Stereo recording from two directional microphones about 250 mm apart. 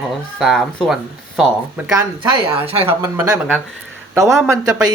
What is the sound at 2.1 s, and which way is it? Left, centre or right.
Speech, right.